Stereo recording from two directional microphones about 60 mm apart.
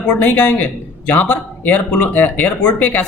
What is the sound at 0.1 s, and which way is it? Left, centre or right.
Speech, left.